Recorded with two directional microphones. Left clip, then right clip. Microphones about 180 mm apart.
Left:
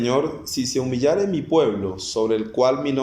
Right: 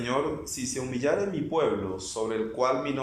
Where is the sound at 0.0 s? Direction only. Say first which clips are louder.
Left 7 dB; 25° left (ahead or behind).